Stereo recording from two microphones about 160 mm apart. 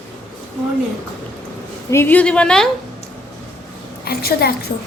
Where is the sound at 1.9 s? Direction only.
15° left (ahead or behind).